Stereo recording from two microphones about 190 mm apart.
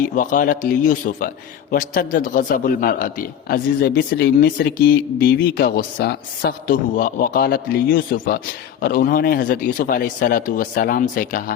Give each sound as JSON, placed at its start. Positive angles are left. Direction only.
{"t": 0.0, "sound": "a man's voice", "side_deg": 45}